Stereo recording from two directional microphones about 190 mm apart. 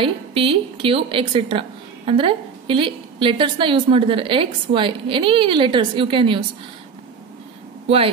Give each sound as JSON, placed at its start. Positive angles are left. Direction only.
{"t": 0.0, "sound": "a woman's voice", "side_deg": -30}